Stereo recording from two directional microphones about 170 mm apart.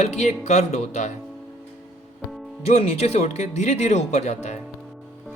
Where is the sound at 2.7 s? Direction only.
40° left (ahead or behind).